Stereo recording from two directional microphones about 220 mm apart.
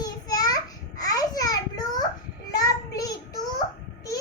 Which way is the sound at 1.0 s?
15° left (ahead or behind).